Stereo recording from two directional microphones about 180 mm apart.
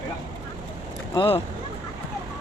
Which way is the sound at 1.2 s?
30° left (ahead or behind).